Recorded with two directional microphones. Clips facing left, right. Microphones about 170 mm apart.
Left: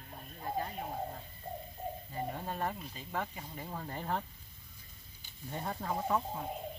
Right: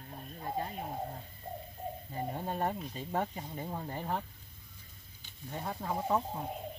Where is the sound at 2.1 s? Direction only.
25° right (ahead or behind).